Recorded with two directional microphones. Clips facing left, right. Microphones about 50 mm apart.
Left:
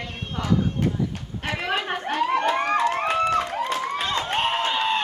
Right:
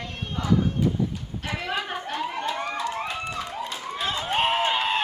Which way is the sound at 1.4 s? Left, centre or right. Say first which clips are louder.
Left 4 dB; left.